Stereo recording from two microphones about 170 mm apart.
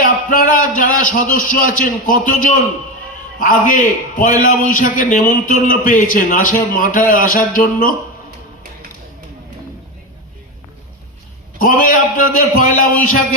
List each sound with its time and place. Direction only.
0.0 s a man's voice: 50° left (ahead or behind)
11.6 s a man's voice: 55° left (ahead or behind)